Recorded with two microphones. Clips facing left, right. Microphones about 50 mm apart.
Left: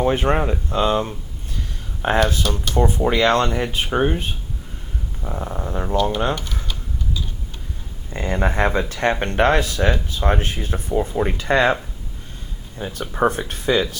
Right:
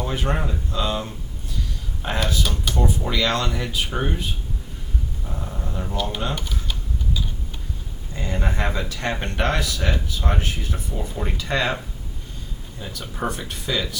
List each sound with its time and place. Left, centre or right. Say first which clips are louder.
0.0 s speech: left 7 dB; left
6.3 s typing: left 2 dB; centre
8.1 s speech: left 6 dB; left
12.8 s speech: left 8 dB; left